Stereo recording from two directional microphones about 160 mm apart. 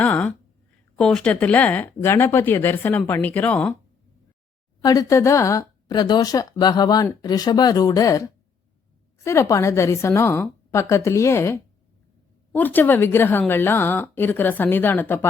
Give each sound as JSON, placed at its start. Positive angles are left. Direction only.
{"t": 0.0, "sound": "a sound", "side_deg": 10}
{"t": 0.9, "sound": "a woman's voice", "side_deg": 5}
{"t": 4.8, "sound": "a woman's voice", "side_deg": 20}